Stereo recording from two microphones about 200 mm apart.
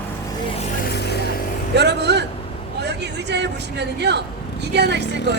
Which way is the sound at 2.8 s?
60° right (ahead or behind).